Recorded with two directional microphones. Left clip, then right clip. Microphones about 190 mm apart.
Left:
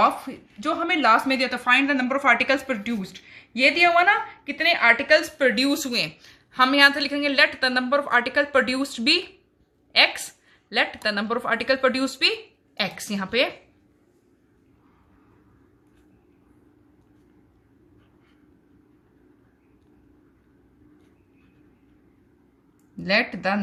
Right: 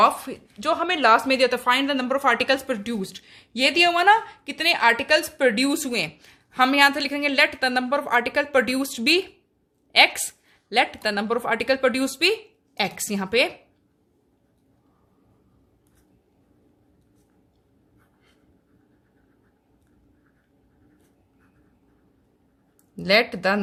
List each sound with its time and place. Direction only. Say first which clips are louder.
0.0 s a woman's voice: right 2 dB; 35° right (ahead or behind)
23.0 s speech: right 3 dB; 40° right (ahead or behind)